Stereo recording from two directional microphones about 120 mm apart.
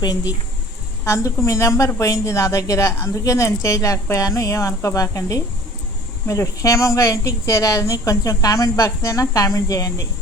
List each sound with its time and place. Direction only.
1.0 s a woman's voice: 25° left (ahead or behind)